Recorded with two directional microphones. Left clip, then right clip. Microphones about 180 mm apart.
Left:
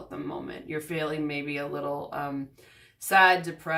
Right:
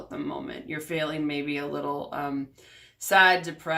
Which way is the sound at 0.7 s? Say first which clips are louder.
Right 1 dB; 15° right (ahead or behind).